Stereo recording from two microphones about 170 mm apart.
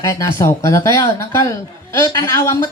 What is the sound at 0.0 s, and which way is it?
A man's voice, 20° left (ahead or behind).